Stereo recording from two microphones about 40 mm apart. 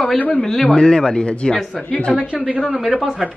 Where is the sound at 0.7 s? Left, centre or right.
Centre.